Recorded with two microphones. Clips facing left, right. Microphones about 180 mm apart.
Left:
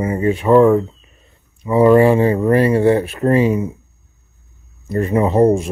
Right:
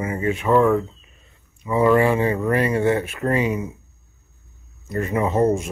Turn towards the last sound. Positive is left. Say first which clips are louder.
# left 6 dB
turn(degrees=30)  # may be behind; listen again after turning